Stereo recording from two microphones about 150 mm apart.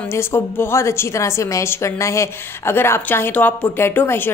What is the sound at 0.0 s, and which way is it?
A woman's voice, 15° left (ahead or behind).